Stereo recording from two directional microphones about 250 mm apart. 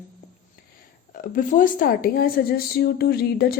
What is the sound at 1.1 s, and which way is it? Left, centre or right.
Speech, left.